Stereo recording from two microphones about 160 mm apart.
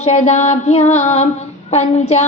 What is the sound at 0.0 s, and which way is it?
A woman's voice, 45° left (ahead or behind).